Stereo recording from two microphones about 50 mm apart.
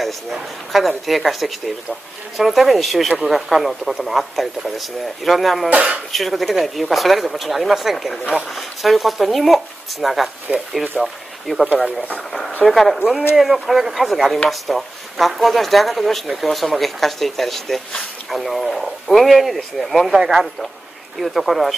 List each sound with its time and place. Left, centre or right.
0.0 s speech: centre
5.7 s speech: right
6.1 s speech: centre